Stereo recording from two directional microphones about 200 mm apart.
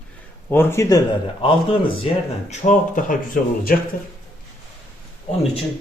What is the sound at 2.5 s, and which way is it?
Speech, 40° left (ahead or behind).